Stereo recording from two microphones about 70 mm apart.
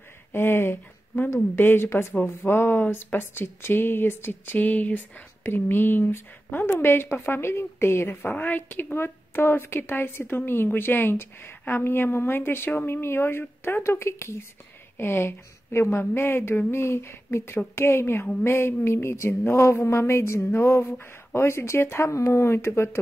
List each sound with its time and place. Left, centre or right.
0.3 s speech: left